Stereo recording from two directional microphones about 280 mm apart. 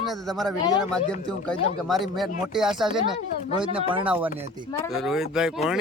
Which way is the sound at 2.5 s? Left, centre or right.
Centre.